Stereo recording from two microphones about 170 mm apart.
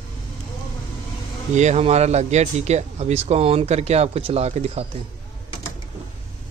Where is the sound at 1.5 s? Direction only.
40° right (ahead or behind).